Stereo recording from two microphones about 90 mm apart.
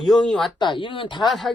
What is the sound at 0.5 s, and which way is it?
Speech, 60° left (ahead or behind).